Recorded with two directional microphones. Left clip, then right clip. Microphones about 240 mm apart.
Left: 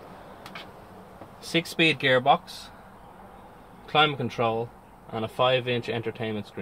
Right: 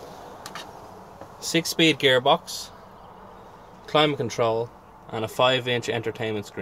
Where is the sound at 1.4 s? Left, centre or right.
Right.